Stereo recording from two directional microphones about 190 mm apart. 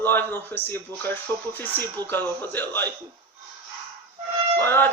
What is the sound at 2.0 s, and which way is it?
Speech, 10° left (ahead or behind).